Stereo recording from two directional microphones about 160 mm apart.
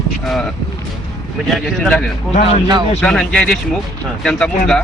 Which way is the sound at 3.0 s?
5° left (ahead or behind).